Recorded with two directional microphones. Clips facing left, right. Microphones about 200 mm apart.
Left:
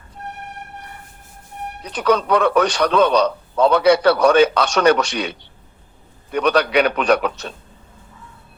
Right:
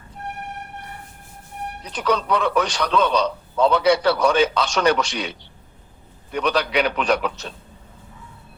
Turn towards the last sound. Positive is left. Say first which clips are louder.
# left 4 dB
turn(degrees=55)  # may be behind; listen again after turning